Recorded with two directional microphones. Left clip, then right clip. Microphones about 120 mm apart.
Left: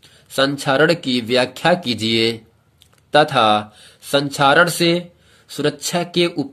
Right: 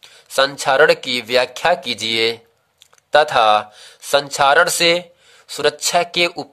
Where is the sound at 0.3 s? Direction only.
45° right (ahead or behind).